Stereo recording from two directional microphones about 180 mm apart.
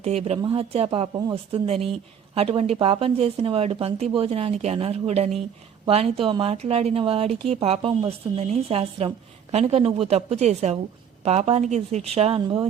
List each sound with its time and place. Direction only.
0.0 s speech: 35° right (ahead or behind)